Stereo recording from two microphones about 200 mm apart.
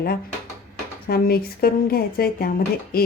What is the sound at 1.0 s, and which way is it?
A woman's voice, 45° left (ahead or behind).